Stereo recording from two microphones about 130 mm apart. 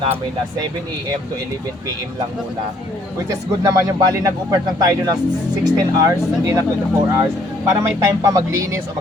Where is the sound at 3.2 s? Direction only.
25° right (ahead or behind).